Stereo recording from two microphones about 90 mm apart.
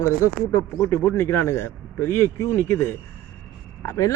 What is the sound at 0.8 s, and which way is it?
Speech, 20° left (ahead or behind).